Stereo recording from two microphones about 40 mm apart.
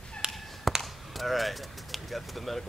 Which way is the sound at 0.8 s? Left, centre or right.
Centre.